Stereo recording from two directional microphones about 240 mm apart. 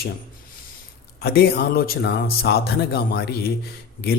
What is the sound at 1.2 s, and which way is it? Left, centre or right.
Speech, left.